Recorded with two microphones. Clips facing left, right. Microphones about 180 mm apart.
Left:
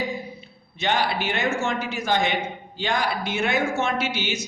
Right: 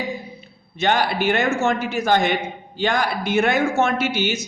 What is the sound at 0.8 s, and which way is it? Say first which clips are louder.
A woman's voice: right 4 dB; 50° right (ahead or behind).